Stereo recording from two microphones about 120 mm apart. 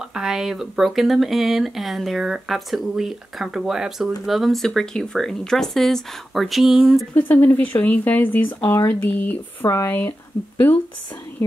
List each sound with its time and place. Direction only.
0.1 s speech: 5° right (ahead or behind)
7.2 s speech: 15° left (ahead or behind)